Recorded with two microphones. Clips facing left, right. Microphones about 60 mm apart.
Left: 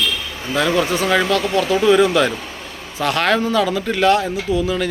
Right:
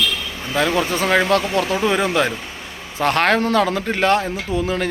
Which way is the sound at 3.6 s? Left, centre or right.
Right.